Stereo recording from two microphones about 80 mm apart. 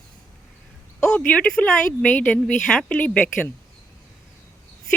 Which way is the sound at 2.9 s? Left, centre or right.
Centre.